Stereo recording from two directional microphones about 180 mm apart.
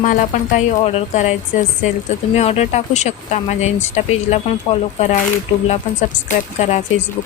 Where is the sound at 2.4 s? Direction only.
35° left (ahead or behind).